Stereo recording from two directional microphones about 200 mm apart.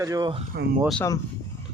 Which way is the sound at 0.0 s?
20° right (ahead or behind).